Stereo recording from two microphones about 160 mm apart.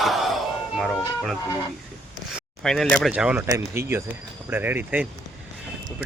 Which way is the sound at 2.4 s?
Centre (ahead or behind).